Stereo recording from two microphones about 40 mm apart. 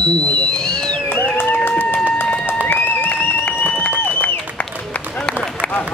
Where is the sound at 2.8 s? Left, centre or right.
Left.